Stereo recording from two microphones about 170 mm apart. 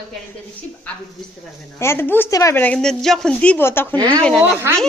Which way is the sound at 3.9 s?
25° right (ahead or behind).